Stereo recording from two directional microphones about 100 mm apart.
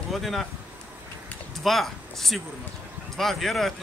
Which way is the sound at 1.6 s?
Centre (ahead or behind).